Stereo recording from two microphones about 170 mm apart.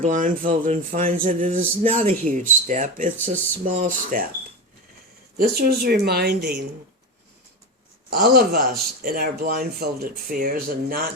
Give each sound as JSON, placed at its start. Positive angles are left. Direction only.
{"t": 0.0, "sound": "speech", "side_deg": -50}
{"t": 5.4, "sound": "speech", "side_deg": -60}
{"t": 8.1, "sound": "speech", "side_deg": -65}